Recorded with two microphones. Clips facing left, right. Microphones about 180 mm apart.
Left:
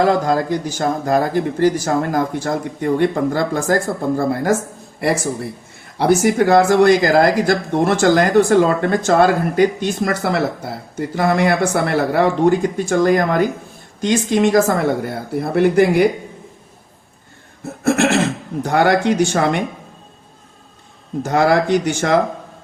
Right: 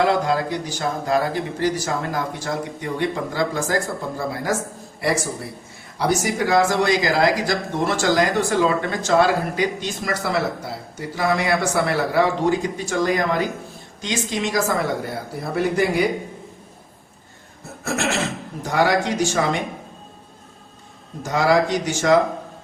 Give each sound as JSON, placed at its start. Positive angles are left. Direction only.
{"t": 0.0, "sound": "speech", "side_deg": 40}
{"t": 6.0, "sound": "speech", "side_deg": 55}
{"t": 17.8, "sound": "a sound", "side_deg": 60}
{"t": 18.6, "sound": "speech", "side_deg": 55}
{"t": 21.2, "sound": "speech", "side_deg": 60}